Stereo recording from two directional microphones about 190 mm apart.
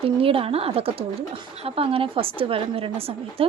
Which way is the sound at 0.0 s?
30° right (ahead or behind).